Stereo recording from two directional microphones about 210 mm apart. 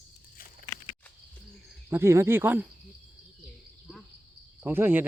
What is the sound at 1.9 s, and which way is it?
Speech, 10° right (ahead or behind).